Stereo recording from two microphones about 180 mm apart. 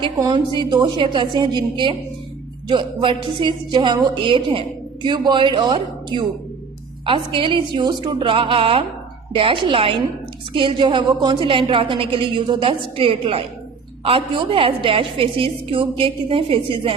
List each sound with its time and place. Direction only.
0.0 s a woman's voice: 25° right (ahead or behind)